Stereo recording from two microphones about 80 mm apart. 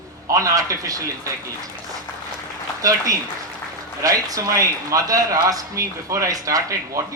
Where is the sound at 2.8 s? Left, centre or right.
Right.